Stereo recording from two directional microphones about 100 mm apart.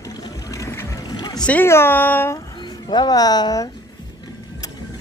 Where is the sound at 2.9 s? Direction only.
40° left (ahead or behind).